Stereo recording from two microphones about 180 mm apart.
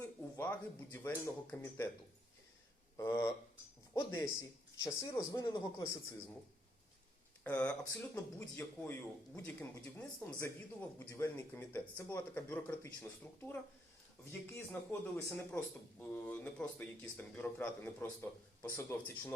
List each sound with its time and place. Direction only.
0.0 s a sound: 10° left (ahead or behind)
0.9 s speech: 10° left (ahead or behind)
3.0 s speech: 15° left (ahead or behind)
7.4 s speech: 10° left (ahead or behind)